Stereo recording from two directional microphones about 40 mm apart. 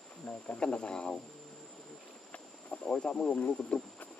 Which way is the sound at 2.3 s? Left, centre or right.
Left.